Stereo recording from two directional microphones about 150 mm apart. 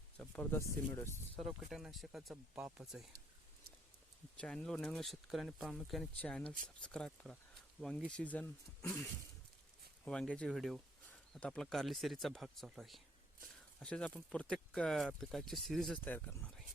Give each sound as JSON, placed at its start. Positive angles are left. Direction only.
{"t": 0.2, "sound": "speech", "side_deg": 15}
{"t": 1.4, "sound": "speech", "side_deg": 0}
{"t": 4.4, "sound": "speech", "side_deg": 5}
{"t": 10.0, "sound": "speech", "side_deg": 5}